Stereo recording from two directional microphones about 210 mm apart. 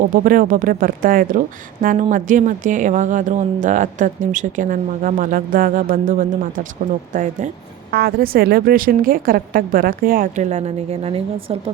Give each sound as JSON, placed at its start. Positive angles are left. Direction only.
{"t": 0.0, "sound": "a woman's voice", "side_deg": -40}